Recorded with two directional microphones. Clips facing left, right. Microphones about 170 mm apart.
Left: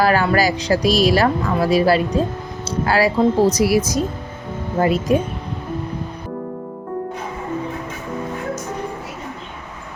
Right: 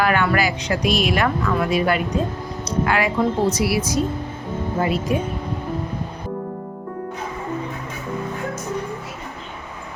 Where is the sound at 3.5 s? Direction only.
40° left (ahead or behind).